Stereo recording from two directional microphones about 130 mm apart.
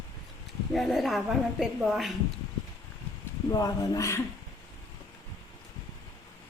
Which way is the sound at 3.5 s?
30° left (ahead or behind).